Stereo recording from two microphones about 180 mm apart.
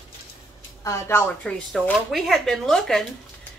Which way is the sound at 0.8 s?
15° left (ahead or behind).